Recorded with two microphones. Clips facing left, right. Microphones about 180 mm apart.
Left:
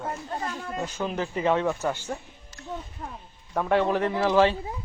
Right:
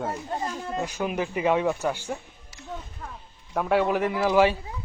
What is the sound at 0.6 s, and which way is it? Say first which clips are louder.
Speech: right 2 dB; 10° right (ahead or behind).